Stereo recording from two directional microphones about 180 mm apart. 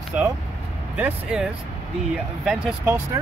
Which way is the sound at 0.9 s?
5° right (ahead or behind).